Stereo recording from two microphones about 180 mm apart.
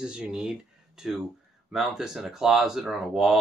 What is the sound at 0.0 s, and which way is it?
Speech, 5° right (ahead or behind).